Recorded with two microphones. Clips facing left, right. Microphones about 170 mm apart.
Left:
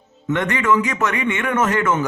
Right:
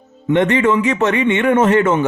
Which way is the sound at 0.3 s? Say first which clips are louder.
Right 5 dB; 25° right (ahead or behind).